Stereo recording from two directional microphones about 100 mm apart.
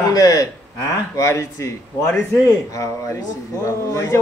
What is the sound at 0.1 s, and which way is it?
Speech, 40° left (ahead or behind).